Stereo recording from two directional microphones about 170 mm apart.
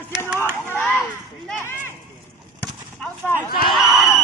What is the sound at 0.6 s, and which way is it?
Speech, 15° left (ahead or behind).